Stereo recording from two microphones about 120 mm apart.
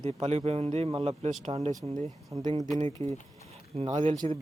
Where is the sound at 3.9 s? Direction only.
40° right (ahead or behind).